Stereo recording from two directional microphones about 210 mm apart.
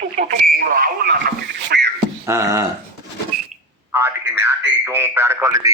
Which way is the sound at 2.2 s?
15° right (ahead or behind).